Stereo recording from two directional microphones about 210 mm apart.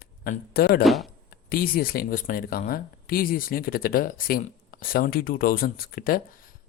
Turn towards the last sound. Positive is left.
turn(degrees=45)  # may be behind; listen again after turning